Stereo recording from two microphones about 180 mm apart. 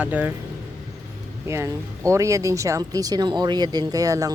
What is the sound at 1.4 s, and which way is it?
Speech, 15° right (ahead or behind).